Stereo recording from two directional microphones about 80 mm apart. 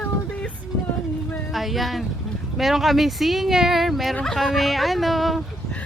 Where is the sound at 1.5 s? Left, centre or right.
Centre.